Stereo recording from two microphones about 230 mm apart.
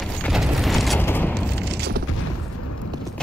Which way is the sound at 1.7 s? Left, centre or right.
Right.